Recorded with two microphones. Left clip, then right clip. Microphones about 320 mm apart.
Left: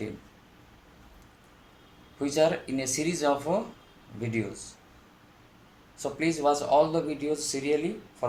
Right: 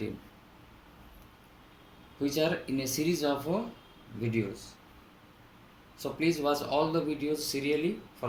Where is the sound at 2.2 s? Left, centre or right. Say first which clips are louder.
Left 5 dB; left.